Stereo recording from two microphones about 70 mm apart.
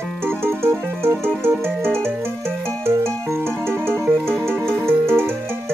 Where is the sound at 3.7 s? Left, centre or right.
Right.